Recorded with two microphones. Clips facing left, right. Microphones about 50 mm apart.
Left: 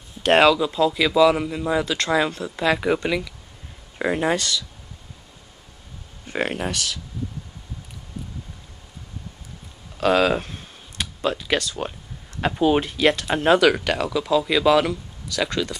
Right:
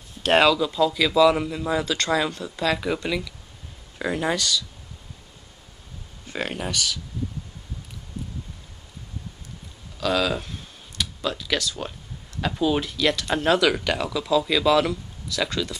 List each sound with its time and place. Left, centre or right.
0.3 s speech: left
4.4 s speech: left
6.2 s speech: left
9.9 s a sound: left
12.4 s speech: left
13.3 s speech: left
13.8 s speech: centre